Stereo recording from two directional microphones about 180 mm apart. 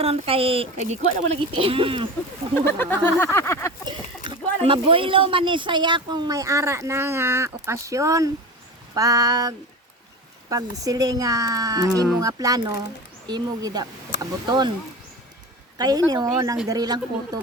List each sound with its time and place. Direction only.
0.0 s speech: 30° right (ahead or behind)
2.6 s speech: 10° left (ahead or behind)
3.8 s speech: 25° right (ahead or behind)
15.8 s speech: 20° right (ahead or behind)